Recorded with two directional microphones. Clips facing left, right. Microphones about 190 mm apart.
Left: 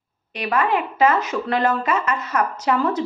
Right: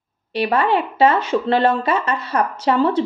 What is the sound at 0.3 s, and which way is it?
Speech, 30° right (ahead or behind).